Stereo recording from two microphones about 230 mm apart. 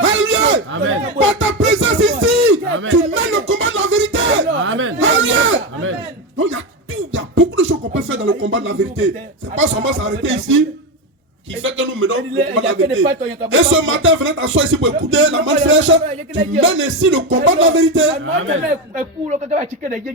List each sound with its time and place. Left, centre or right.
0.0 s music: right
9.6 s speech: right
11.6 s speech: right
18.9 s speech: right